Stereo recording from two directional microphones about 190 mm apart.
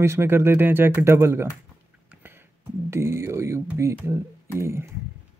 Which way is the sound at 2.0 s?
10° right (ahead or behind).